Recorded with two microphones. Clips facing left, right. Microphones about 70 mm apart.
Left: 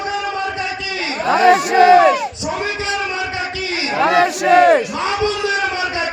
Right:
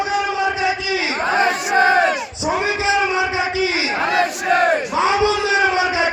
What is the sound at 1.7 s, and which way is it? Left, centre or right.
Crowd, right.